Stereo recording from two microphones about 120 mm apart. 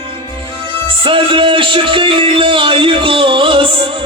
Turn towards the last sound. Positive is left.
turn(degrees=-45)  # may be behind; listen again after turning